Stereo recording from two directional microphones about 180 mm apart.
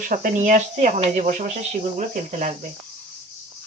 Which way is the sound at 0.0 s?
45° right (ahead or behind).